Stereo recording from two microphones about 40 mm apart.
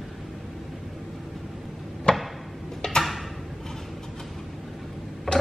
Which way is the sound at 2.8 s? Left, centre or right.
Centre.